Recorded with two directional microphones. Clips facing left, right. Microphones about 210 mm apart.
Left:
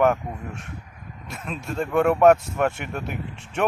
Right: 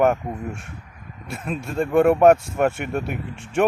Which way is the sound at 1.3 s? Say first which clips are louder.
Right 5 dB; 5° right (ahead or behind).